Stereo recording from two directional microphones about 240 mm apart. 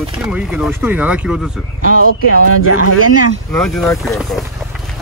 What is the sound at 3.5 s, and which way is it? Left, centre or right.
Speech, centre.